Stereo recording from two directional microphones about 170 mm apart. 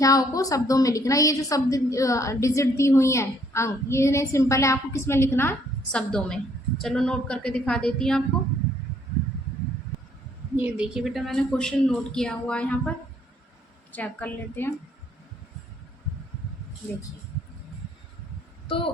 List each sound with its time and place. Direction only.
0.0 s a woman's voice: 20° left (ahead or behind); by 8.2 s 5° left (ahead or behind)
10.6 s a woman's voice: 5° right (ahead or behind)
13.9 s a woman's voice: 10° left (ahead or behind)